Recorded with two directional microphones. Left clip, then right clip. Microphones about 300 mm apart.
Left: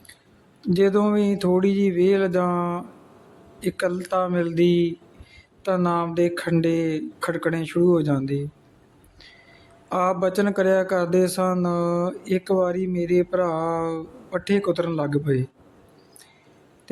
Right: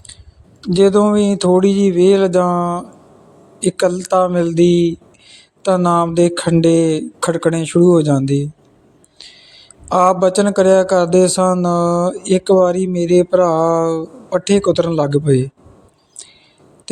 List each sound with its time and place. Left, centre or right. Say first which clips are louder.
0.6 s speech: right 8 dB; centre
9.9 s speech: right 10 dB; centre